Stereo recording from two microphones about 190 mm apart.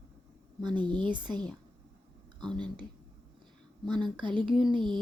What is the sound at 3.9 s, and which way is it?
Speech, 25° right (ahead or behind).